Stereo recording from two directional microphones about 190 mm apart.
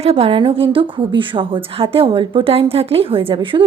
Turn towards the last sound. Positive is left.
turn(degrees=-25)  # may be behind; listen again after turning